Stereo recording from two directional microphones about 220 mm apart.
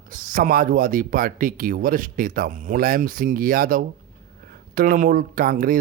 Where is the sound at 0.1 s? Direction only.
40° right (ahead or behind).